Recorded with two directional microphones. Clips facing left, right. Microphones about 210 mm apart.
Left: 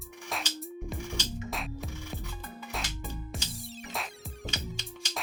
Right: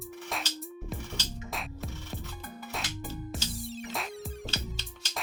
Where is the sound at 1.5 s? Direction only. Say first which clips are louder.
Left 1 dB; centre (ahead or behind).